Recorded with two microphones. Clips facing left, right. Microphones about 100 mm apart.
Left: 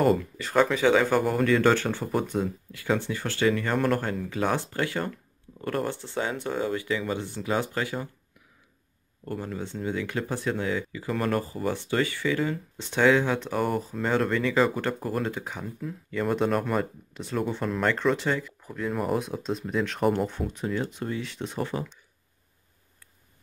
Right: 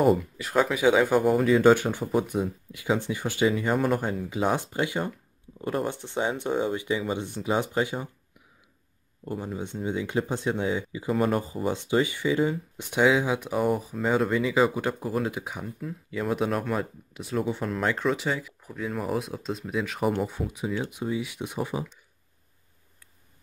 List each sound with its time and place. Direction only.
0.0 s speech: 5° right (ahead or behind)
9.2 s speech: 10° right (ahead or behind)